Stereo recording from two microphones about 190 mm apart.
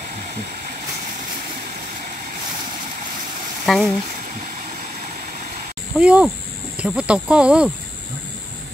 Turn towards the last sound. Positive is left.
turn(degrees=-5)  # may be behind; listen again after turning